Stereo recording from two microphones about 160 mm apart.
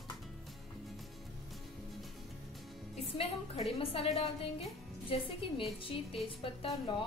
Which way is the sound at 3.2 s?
40° left (ahead or behind).